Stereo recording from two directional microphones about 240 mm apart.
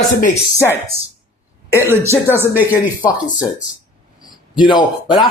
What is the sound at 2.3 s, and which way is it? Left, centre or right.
Speech, centre.